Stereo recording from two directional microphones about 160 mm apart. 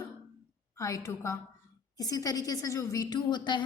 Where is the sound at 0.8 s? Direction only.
20° left (ahead or behind).